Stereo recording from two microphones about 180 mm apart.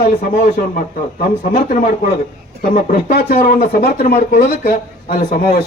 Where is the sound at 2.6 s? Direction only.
50° left (ahead or behind).